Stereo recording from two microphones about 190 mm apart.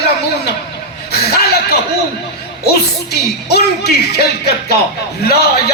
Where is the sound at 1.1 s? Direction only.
55° left (ahead or behind).